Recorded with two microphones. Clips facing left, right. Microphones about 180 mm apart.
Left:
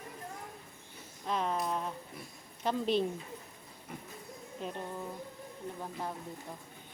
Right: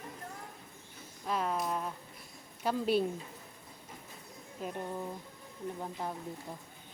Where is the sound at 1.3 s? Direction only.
5° right (ahead or behind).